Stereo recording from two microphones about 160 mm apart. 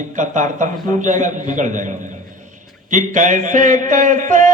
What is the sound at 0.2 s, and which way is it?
A man's voice, 55° right (ahead or behind).